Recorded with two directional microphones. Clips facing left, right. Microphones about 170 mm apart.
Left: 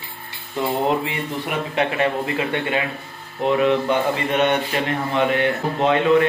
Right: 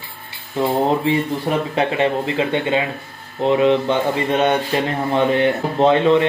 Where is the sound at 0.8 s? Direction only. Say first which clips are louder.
Right 4 dB; 30° right (ahead or behind).